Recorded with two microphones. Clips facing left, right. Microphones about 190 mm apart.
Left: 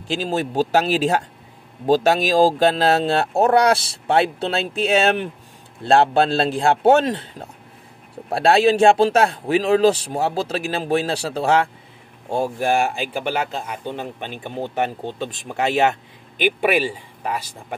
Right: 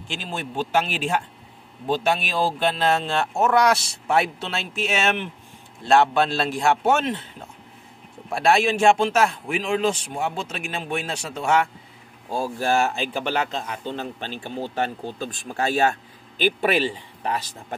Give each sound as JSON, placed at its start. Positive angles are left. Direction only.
{"t": 0.1, "sound": "speech", "side_deg": 40}